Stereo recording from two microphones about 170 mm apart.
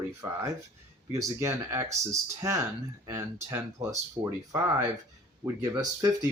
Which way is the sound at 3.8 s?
20° right (ahead or behind).